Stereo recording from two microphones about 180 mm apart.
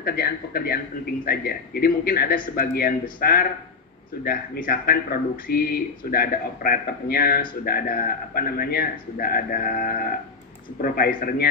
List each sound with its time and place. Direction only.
0.0 s speech: 60° left (ahead or behind)